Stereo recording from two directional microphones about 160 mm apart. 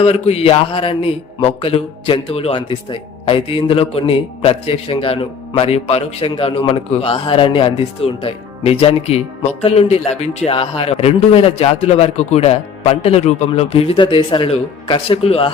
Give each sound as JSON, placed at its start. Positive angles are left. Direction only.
{"t": 0.0, "sound": "speech", "side_deg": 40}